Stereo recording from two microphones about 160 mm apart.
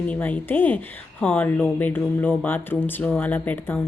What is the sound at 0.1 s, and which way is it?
Speech, 10° left (ahead or behind).